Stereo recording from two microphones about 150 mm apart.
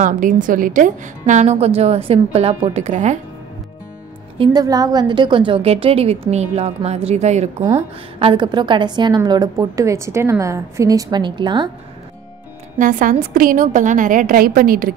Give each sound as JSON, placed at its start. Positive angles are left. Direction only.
{"t": 0.0, "sound": "a woman's voice", "side_deg": -60}
{"t": 4.6, "sound": "a woman's voice", "side_deg": -25}
{"t": 8.2, "sound": "a woman's voice", "side_deg": -35}
{"t": 12.7, "sound": "a woman's voice", "side_deg": -60}